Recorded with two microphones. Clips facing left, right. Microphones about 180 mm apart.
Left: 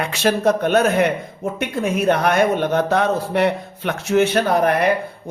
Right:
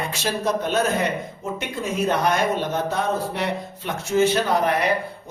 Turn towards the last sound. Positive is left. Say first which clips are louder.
# left 3 dB
turn(degrees=60)  # may be behind; listen again after turning